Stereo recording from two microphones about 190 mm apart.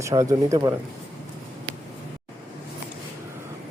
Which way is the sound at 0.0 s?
15° right (ahead or behind).